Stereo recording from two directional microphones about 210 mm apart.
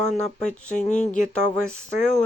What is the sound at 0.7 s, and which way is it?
Speech, 35° left (ahead or behind).